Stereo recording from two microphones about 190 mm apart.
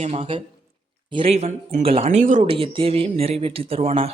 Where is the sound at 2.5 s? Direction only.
30° right (ahead or behind).